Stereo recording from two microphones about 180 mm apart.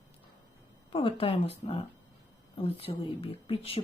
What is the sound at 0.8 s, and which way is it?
A woman's voice, 30° left (ahead or behind).